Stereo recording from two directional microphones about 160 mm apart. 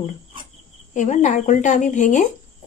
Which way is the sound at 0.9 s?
50° left (ahead or behind).